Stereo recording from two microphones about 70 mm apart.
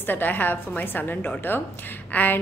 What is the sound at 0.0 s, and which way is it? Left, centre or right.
A woman's voice, left.